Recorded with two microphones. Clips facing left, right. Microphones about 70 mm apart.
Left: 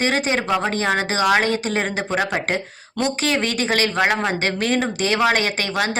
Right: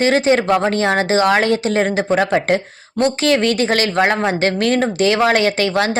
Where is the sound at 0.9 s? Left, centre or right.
Right.